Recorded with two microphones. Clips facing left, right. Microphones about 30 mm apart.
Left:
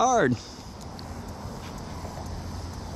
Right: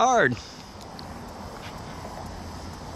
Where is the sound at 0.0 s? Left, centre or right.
Centre.